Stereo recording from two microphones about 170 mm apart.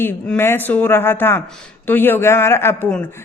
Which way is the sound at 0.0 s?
15° left (ahead or behind).